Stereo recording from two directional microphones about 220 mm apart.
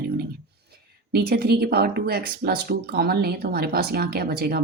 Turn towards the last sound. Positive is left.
turn(degrees=-45)  # may be behind; listen again after turning